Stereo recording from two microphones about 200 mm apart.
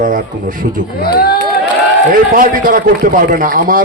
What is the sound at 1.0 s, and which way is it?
Speech, 50° left (ahead or behind).